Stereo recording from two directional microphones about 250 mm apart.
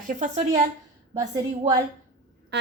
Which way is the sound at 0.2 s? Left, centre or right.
Right.